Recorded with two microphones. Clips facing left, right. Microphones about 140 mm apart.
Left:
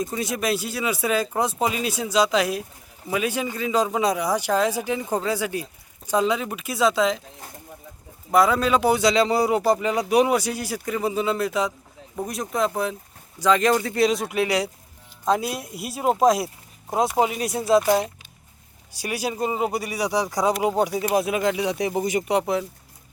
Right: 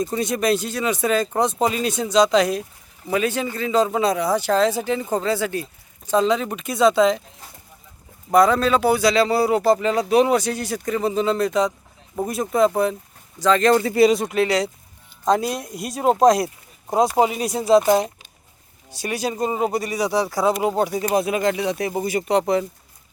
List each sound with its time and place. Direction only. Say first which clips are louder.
0.0 s speech: right 4 dB; 5° left (ahead or behind)
8.3 s speech: right 3 dB; 5° left (ahead or behind)
13.4 s speech: right 3 dB; 10° left (ahead or behind)
13.8 s speech: right 5 dB; 5° right (ahead or behind)
14.3 s speech: right 3 dB; 10° left (ahead or behind)
17.7 s speech: right 3 dB; 20° right (ahead or behind)
18.9 s speech: right 2 dB; 10° left (ahead or behind)